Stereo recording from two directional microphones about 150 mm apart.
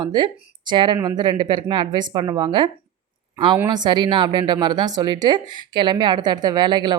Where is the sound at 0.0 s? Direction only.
30° right (ahead or behind).